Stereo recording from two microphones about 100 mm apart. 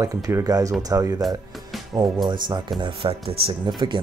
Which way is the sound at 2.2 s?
45° right (ahead or behind).